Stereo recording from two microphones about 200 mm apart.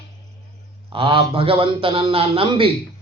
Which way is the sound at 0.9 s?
25° right (ahead or behind).